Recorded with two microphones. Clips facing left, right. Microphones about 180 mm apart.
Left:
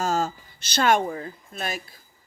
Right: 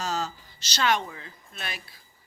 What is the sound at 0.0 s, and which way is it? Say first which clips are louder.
Speech: left 6 dB; 50° left (ahead or behind).